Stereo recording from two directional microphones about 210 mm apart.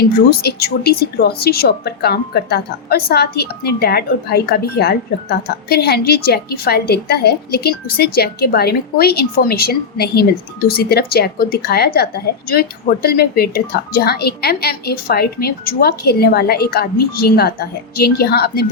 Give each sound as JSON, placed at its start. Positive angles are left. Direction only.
{"t": 0.3, "sound": "a woman's voice", "side_deg": 45}